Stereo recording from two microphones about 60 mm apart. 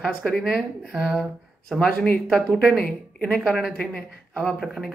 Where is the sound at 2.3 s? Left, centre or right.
Centre.